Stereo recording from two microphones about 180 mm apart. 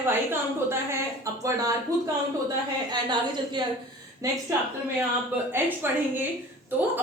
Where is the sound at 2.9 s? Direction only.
25° right (ahead or behind).